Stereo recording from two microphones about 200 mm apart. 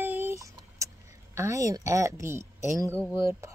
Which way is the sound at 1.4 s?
15° right (ahead or behind).